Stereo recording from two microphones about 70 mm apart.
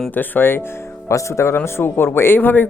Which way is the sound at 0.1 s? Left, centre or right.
Left.